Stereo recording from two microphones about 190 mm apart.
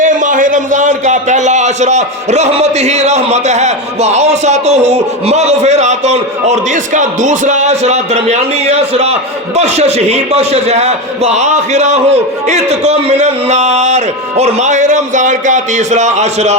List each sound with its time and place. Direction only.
0.0 s a man's voice: 45° right (ahead or behind)